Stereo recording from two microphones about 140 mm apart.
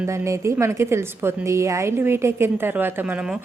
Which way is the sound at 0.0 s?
20° right (ahead or behind).